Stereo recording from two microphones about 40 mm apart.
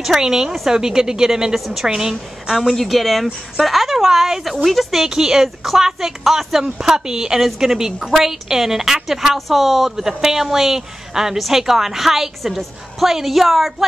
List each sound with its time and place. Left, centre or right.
0.0 s speech: centre
2.7 s speech: centre
5.0 s speech: centre